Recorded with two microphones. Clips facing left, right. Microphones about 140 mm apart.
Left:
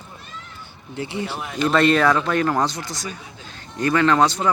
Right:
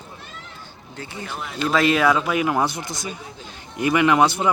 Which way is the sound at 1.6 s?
5° right (ahead or behind).